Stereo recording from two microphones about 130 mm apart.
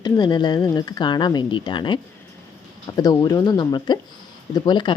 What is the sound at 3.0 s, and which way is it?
Speech, 30° left (ahead or behind).